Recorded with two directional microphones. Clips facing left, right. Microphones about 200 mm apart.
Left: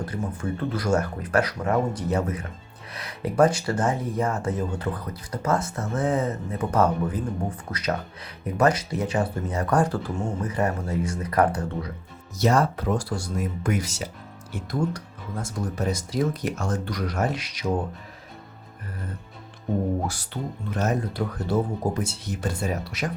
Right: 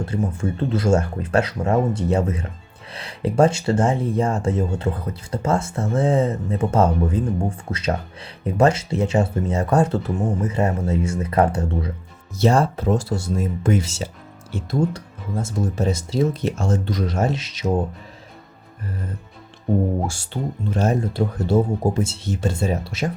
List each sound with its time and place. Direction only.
0.0 s speech: 25° right (ahead or behind)
20.1 s speech: 25° right (ahead or behind)